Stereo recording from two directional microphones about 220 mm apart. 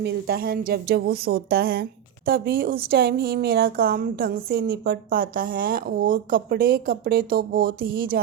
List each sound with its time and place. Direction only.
0.0 s speech: 45° right (ahead or behind)